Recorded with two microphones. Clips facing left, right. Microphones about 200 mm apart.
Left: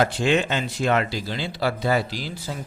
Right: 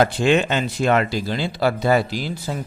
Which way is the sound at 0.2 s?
55° right (ahead or behind).